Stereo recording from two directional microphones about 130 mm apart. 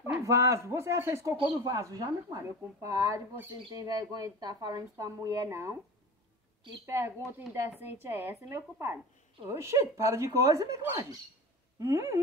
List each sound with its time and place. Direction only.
0.0 s speech: 20° right (ahead or behind)
6.9 s a woman's voice: 20° right (ahead or behind)
11.8 s speech: 20° right (ahead or behind)